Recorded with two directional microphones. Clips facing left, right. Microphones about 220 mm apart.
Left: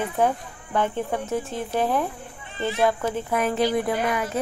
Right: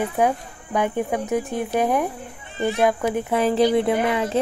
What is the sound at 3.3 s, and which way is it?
Speech, 30° right (ahead or behind).